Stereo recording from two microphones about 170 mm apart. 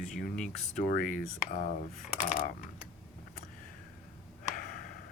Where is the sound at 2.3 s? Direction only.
55° left (ahead or behind).